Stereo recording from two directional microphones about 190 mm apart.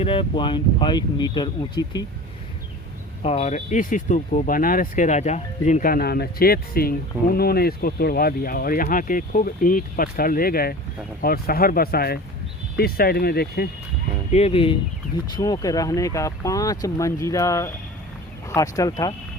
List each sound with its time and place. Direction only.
0.0 s speech: 30° left (ahead or behind)
3.2 s speech: 35° left (ahead or behind); by 13.7 s 55° left (ahead or behind)
14.3 s speech: 35° left (ahead or behind)